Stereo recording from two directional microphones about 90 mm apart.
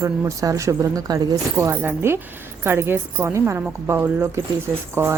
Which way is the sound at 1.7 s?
20° right (ahead or behind).